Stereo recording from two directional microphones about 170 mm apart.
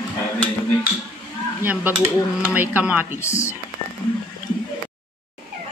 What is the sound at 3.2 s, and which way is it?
Speech, 15° left (ahead or behind).